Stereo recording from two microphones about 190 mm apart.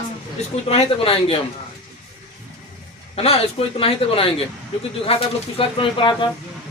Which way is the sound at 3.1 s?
30° left (ahead or behind).